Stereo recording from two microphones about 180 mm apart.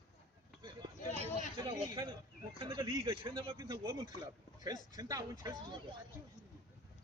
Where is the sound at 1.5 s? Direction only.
30° right (ahead or behind).